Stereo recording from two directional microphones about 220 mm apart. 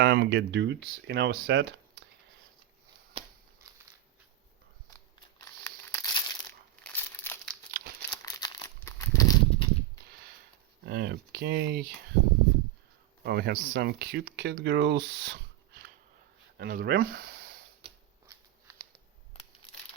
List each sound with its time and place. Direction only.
0.0 s speech: 50° right (ahead or behind)
3.1 s a sound: 25° right (ahead or behind)
5.6 s crumpling: 10° left (ahead or behind)
7.7 s crumpling: 40° right (ahead or behind)
8.2 s crumpling: 15° left (ahead or behind)
10.8 s speech: 45° right (ahead or behind)
13.2 s speech: 45° right (ahead or behind)
17.8 s a sound: 25° right (ahead or behind)
19.3 s crushing: 25° left (ahead or behind)